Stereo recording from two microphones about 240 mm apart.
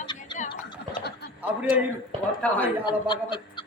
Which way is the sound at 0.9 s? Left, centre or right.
Left.